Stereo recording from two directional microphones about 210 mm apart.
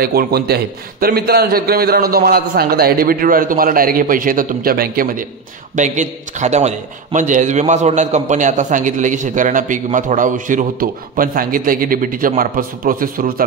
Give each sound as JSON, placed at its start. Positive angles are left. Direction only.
{"t": 0.0, "sound": "a man's voice", "side_deg": -45}